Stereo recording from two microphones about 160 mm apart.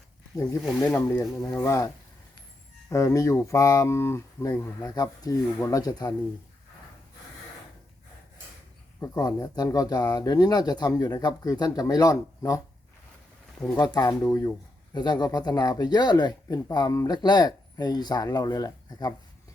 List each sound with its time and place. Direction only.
0.8 s speech: 15° left (ahead or behind)
2.9 s speech: 20° left (ahead or behind)
9.0 s speech: 20° left (ahead or behind)
13.7 s speech: 25° left (ahead or behind)